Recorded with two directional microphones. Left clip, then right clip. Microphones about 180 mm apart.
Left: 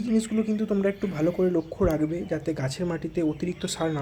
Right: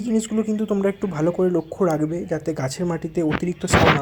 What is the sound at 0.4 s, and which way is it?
Speech, 10° right (ahead or behind).